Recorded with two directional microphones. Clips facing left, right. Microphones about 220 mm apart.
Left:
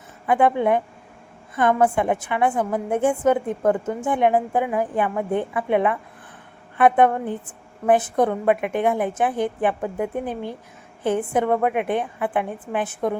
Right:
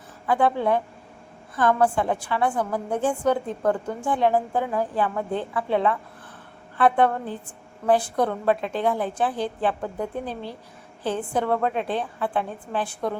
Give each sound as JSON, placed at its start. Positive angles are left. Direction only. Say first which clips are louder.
{"t": 0.3, "sound": "a woman's voice", "louder": "left 3 dB", "side_deg": 20}